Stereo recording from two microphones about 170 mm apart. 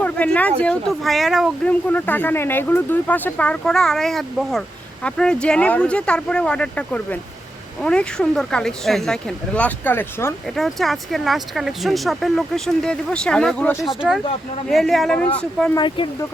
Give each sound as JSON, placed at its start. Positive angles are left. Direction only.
{"t": 0.0, "sound": "a sound", "side_deg": 10}
{"t": 0.6, "sound": "speech", "side_deg": 5}
{"t": 1.9, "sound": "speech", "side_deg": 10}
{"t": 10.5, "sound": "speech", "side_deg": 0}
{"t": 15.7, "sound": "speech", "side_deg": 30}